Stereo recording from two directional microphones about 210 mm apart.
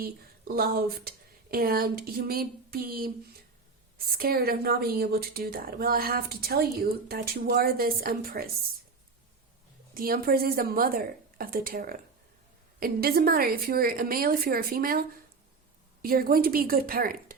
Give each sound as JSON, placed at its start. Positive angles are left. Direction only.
{"t": 0.0, "sound": "a woman's voice", "side_deg": -45}
{"t": 9.9, "sound": "a woman's voice", "side_deg": -45}